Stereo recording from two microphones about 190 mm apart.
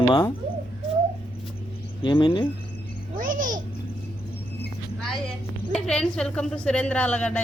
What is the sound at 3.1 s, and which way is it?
Babbling, 45° right (ahead or behind).